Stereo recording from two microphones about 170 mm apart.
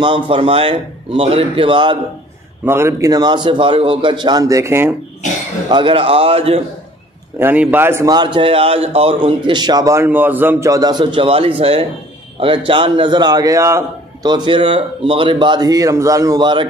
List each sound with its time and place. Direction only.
0.0 s a man's voice: 30° right (ahead or behind)
2.6 s a man's voice: 15° right (ahead or behind)
5.7 s a man's voice: 30° right (ahead or behind)
7.3 s a man's voice: 10° right (ahead or behind)
8.1 s a man's voice: 25° right (ahead or behind)